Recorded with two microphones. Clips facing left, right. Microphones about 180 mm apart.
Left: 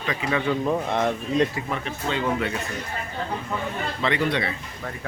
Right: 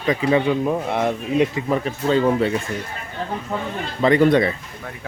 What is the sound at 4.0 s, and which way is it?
Speech, 40° right (ahead or behind).